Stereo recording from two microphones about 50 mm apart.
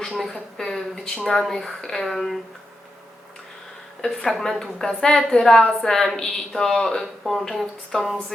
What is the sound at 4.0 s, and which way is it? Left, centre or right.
A woman's voice, centre.